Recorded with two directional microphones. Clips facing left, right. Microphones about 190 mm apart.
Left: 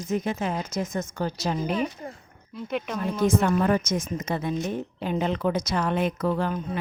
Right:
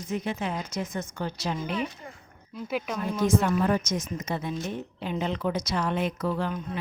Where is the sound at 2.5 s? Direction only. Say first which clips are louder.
Left 1 dB; 5° right (ahead or behind).